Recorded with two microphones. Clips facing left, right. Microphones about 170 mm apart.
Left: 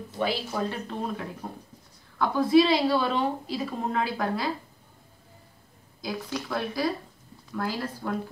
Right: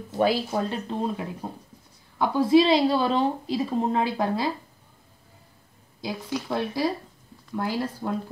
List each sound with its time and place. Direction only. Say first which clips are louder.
0.2 s speech: right 6 dB; 40° right (ahead or behind)
0.7 s a woman's voice: right 3 dB; 20° right (ahead or behind)
6.3 s a woman's voice: right 4 dB; 20° right (ahead or behind)